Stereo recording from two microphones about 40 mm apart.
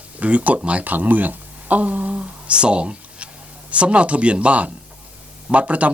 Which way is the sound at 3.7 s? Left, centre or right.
Right.